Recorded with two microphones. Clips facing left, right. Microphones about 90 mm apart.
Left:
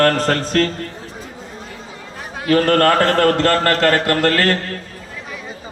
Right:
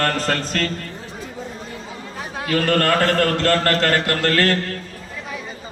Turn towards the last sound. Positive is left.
turn(degrees=45)  # may be behind; listen again after turning